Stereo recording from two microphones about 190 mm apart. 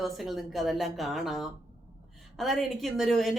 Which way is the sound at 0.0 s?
Centre (ahead or behind).